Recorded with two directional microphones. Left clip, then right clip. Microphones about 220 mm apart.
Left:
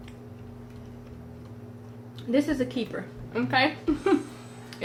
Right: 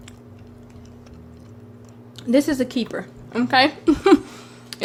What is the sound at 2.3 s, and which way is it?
A woman's voice, 45° right (ahead or behind).